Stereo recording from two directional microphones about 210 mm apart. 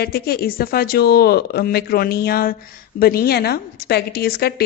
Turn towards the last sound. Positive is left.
turn(degrees=50)  # may be behind; listen again after turning